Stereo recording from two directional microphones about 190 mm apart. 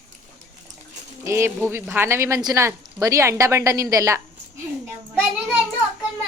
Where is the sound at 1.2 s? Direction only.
15° right (ahead or behind).